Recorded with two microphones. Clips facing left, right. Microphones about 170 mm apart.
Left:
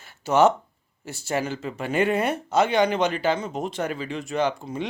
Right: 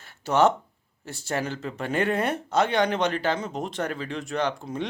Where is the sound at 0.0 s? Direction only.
Centre (ahead or behind).